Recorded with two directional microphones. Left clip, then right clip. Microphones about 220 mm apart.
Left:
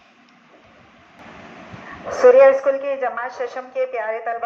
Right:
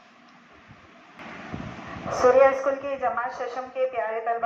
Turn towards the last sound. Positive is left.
turn(degrees=50)  # may be behind; listen again after turning